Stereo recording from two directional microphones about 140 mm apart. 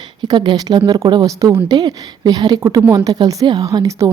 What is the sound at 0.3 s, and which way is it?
Speech, 30° right (ahead or behind).